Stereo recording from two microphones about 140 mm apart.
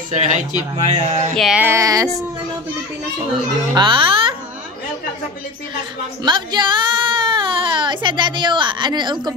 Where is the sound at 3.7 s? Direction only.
35° right (ahead or behind).